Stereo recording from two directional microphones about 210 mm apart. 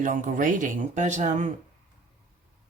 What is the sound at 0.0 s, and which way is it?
Speech, 40° right (ahead or behind).